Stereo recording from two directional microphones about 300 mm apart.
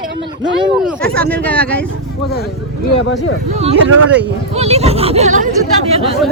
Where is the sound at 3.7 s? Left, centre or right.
Right.